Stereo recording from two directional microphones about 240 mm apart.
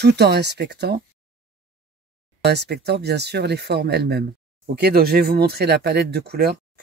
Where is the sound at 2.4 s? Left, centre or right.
Right.